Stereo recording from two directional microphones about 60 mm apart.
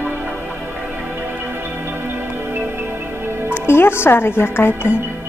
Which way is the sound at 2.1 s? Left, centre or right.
Right.